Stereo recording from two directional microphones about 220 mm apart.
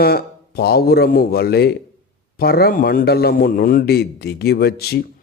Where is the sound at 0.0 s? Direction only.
45° left (ahead or behind).